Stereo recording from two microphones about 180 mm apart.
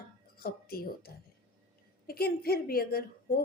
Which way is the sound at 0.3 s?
55° left (ahead or behind).